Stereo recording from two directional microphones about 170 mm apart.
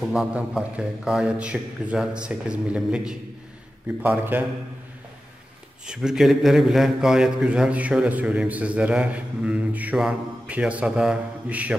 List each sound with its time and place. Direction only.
0.0 s a man's voice: 5° right (ahead or behind)
5.9 s a man's voice: 5° right (ahead or behind)